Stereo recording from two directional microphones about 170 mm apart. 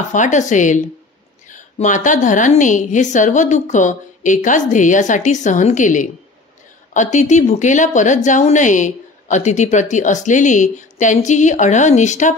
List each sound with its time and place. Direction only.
0.1 s speech: 45° left (ahead or behind)